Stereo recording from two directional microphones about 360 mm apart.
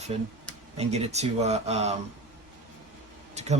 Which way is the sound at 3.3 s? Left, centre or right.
Centre.